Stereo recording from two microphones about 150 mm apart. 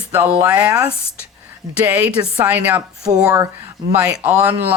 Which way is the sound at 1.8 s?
10° right (ahead or behind).